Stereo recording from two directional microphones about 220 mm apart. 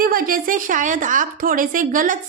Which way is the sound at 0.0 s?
40° right (ahead or behind).